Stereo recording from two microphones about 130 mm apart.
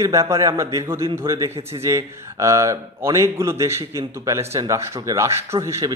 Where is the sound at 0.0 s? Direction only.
20° right (ahead or behind).